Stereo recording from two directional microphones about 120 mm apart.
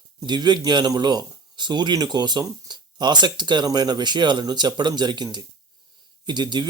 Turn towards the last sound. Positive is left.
turn(degrees=-35)  # may be behind; listen again after turning